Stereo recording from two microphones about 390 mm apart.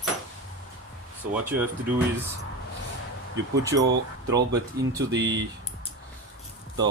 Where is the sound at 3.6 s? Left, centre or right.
Centre.